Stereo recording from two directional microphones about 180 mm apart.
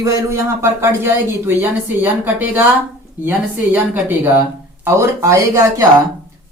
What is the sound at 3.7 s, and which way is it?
Speech, 10° right (ahead or behind).